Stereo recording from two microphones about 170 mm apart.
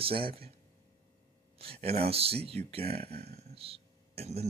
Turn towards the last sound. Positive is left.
turn(degrees=-35)  # may be behind; listen again after turning